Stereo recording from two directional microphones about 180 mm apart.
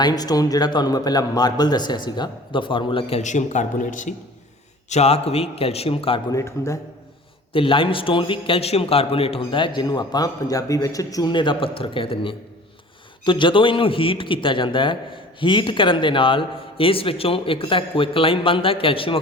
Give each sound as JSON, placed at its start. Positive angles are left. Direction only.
{"t": 0.0, "sound": "a man's voice", "side_deg": 20}
{"t": 6.3, "sound": "a man's voice", "side_deg": 15}
{"t": 7.5, "sound": "a man's voice", "side_deg": 30}